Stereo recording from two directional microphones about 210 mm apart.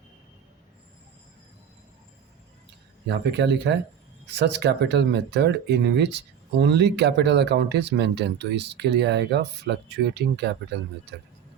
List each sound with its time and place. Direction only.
3.1 s speech: 55° right (ahead or behind)